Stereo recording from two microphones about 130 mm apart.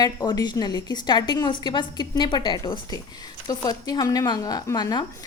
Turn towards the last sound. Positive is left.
turn(degrees=30)  # may be behind; listen again after turning